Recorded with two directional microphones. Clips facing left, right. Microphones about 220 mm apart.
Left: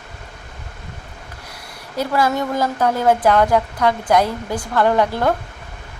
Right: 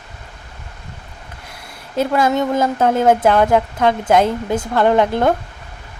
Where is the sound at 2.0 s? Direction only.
20° right (ahead or behind).